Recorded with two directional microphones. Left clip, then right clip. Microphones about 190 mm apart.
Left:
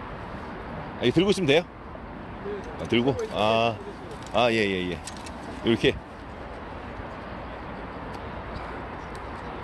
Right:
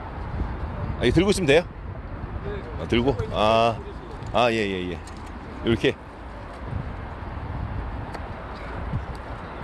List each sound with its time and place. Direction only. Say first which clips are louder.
1.0 s speech: right 2 dB; 25° right (ahead or behind)
2.9 s a man's voice: right 1 dB; 20° right (ahead or behind)
4.6 s speech: left 1 dB; 5° right (ahead or behind)